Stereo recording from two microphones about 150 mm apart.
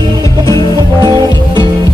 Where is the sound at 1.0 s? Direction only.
30° right (ahead or behind).